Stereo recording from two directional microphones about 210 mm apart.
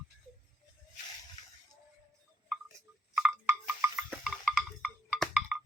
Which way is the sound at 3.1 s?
10° right (ahead or behind).